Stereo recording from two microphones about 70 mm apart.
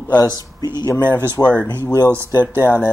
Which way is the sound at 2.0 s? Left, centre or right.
Right.